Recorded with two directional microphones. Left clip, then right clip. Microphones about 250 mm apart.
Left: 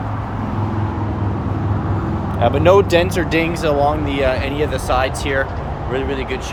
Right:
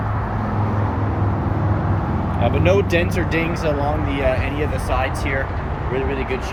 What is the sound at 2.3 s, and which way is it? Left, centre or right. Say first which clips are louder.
Speech: left 6 dB; centre.